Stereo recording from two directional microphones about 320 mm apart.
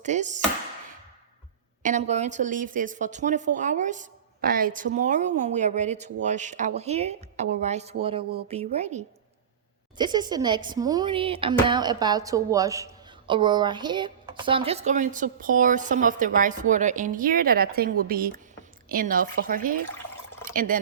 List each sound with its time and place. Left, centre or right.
0.0 s speech: right
1.8 s speech: right
10.0 s speech: centre